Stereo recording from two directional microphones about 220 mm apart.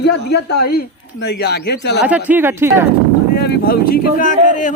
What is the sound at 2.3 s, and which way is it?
Speech, 10° right (ahead or behind).